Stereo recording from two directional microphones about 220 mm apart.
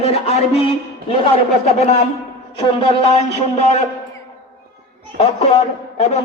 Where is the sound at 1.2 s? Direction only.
30° left (ahead or behind).